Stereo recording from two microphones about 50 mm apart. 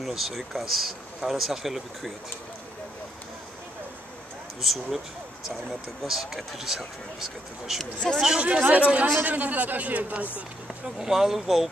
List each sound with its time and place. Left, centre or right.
0.0 s speech: centre
4.6 s speech: centre
6.0 s speech: centre
7.8 s speech: centre
8.4 s a man's voice: right
11.0 s speech: centre